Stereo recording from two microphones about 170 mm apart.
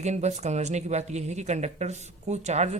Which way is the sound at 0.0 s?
40° right (ahead or behind).